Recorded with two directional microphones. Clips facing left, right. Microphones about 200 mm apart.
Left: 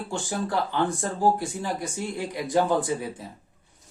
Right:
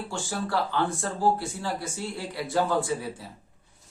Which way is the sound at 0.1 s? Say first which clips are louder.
Left 2 dB; 15° left (ahead or behind).